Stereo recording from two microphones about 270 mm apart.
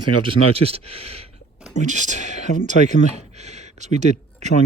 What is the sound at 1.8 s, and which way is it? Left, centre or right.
Speech, right.